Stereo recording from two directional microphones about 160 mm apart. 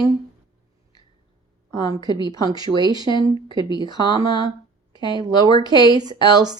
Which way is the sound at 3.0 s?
30° left (ahead or behind).